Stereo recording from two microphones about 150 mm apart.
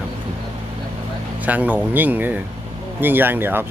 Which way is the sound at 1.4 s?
10° right (ahead or behind).